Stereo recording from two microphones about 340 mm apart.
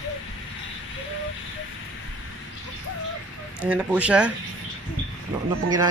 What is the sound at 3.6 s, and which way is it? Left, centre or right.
Speech, centre.